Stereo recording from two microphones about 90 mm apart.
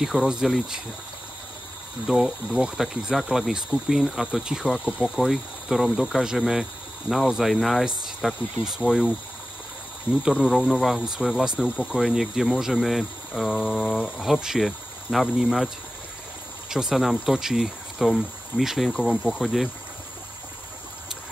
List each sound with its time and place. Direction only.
0.0 s speech: 5° right (ahead or behind)
2.0 s speech: 5° right (ahead or behind)
10.2 s speech: 5° right (ahead or behind)